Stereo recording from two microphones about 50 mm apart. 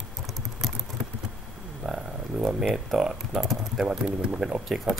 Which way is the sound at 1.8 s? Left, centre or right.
Centre.